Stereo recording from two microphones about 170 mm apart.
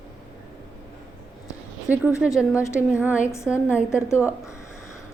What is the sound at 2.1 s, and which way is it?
A woman's voice, 5° right (ahead or behind).